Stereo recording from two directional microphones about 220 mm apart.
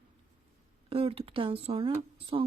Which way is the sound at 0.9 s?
25° right (ahead or behind).